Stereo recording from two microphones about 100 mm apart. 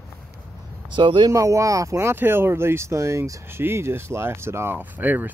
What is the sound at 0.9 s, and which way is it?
Speech, 55° right (ahead or behind).